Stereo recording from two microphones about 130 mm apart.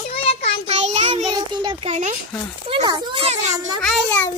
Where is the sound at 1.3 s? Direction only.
35° right (ahead or behind).